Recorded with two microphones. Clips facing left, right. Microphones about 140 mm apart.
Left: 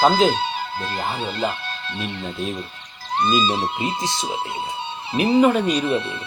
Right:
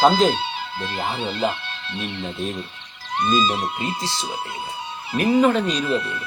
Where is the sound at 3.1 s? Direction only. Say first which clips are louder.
Left 1 dB; 30° left (ahead or behind).